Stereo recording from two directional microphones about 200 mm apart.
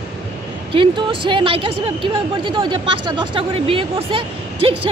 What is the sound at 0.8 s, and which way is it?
A woman's voice, 25° right (ahead or behind).